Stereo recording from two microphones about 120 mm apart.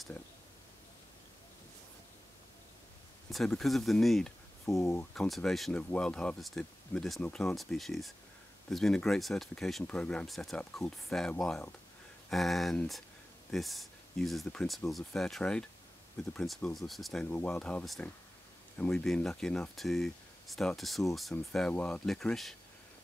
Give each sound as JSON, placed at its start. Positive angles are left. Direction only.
{"t": 3.3, "sound": "speech", "side_deg": 0}
{"t": 4.7, "sound": "speech", "side_deg": 25}
{"t": 5.1, "sound": "speech", "side_deg": 5}